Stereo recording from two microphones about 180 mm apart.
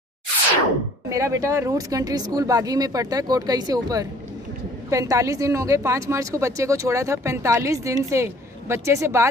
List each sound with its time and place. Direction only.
1.0 s a woman's voice: 15° right (ahead or behind)